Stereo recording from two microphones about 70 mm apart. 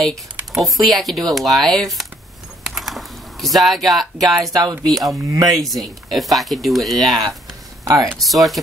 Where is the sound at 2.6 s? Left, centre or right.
Centre.